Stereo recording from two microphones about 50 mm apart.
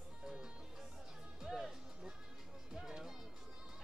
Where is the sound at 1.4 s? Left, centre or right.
Centre.